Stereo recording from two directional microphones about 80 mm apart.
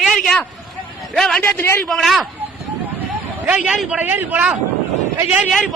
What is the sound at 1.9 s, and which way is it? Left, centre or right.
Speech, centre.